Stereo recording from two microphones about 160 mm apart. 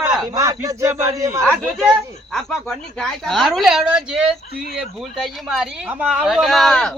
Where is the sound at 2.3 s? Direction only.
Centre (ahead or behind).